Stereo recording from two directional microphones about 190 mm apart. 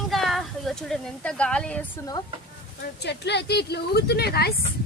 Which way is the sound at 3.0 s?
60° left (ahead or behind).